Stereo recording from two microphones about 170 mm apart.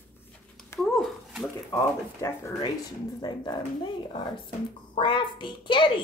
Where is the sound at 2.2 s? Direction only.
15° left (ahead or behind).